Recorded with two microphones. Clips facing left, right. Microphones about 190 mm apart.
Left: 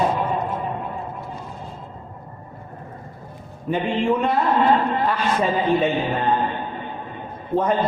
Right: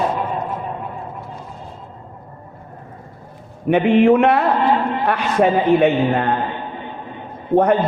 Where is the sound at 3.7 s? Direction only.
70° right (ahead or behind).